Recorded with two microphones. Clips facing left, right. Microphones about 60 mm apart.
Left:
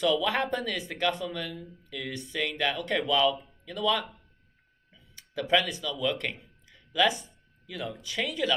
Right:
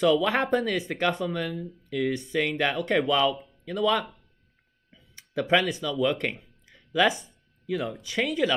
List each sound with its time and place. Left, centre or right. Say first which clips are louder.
0.0 s speech: right 4 dB; right
5.1 s speech: right 3 dB; right